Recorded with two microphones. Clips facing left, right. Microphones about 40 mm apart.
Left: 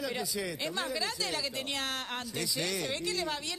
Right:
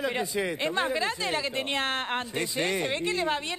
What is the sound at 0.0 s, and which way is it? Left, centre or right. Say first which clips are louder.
A man's voice: right 6 dB; right.